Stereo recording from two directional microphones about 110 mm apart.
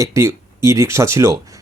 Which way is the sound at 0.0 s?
30° right (ahead or behind).